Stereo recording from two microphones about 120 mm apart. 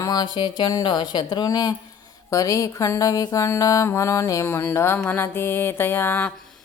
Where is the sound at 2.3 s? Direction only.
25° left (ahead or behind).